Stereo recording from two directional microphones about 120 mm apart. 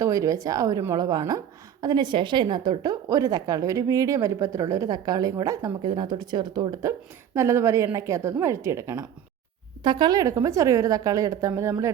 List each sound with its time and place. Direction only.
0.0 s a woman's voice: 25° right (ahead or behind)
9.8 s a woman's voice: 40° right (ahead or behind); by 11.9 s 25° right (ahead or behind)